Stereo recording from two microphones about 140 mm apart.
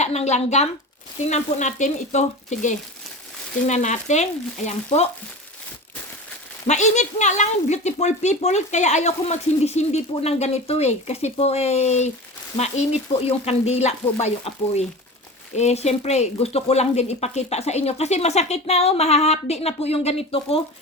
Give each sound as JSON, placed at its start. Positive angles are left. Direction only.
{"t": 0.0, "sound": "speech", "side_deg": 50}
{"t": 6.7, "sound": "speech", "side_deg": 55}